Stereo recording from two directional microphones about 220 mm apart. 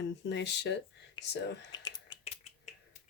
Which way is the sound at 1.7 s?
20° left (ahead or behind).